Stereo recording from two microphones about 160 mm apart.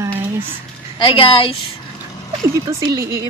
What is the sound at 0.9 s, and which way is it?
Speech, 30° left (ahead or behind).